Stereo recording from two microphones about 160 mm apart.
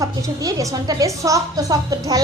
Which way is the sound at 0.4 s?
25° right (ahead or behind).